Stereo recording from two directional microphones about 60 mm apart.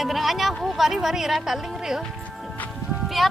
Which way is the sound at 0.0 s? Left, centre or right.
Centre.